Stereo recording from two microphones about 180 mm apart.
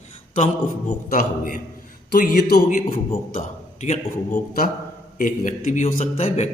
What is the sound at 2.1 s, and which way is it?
Speech, 60° left (ahead or behind).